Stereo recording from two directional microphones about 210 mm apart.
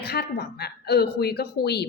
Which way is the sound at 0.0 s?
50° left (ahead or behind).